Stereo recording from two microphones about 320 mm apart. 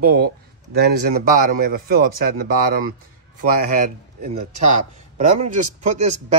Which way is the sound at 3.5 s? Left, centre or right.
Right.